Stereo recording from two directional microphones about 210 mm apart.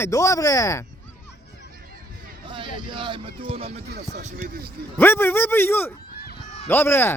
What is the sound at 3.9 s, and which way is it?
Speech, 50° right (ahead or behind).